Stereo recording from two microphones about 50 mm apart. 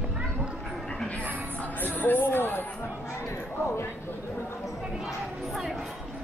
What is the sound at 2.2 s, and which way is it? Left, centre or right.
Speech, left.